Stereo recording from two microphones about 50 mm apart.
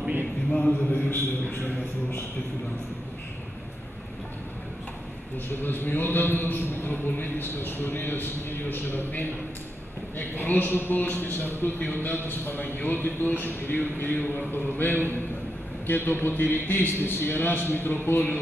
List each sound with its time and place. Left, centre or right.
0.7 s a man's voice: left
5.5 s a man's voice: left